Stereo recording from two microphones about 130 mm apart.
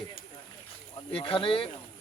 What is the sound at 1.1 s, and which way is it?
Speech, 45° left (ahead or behind).